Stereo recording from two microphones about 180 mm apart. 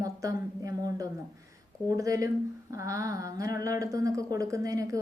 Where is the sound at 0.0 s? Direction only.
20° right (ahead or behind).